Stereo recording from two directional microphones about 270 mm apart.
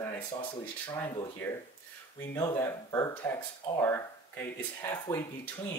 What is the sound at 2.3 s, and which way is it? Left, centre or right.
Speech, centre.